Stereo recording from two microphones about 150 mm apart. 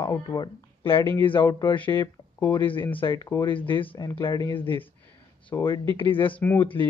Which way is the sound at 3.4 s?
35° left (ahead or behind).